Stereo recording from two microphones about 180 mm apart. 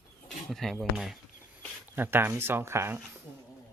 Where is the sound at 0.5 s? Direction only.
Centre (ahead or behind).